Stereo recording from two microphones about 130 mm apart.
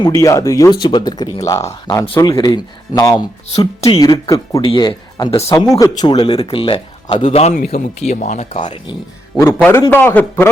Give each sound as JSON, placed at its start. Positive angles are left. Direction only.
{"t": 0.1, "sound": "speech", "side_deg": 25}
{"t": 3.8, "sound": "speech", "side_deg": 50}
{"t": 4.0, "sound": "speech", "side_deg": 25}
{"t": 4.7, "sound": "speech", "side_deg": 40}
{"t": 5.1, "sound": "speech", "side_deg": 30}
{"t": 7.2, "sound": "a man's voice", "side_deg": 65}
{"t": 8.5, "sound": "speech", "side_deg": 40}
{"t": 9.6, "sound": "a man's voice", "side_deg": 10}